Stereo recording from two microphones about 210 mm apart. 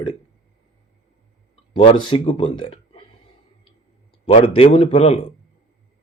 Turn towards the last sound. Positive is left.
turn(degrees=30)  # may be behind; listen again after turning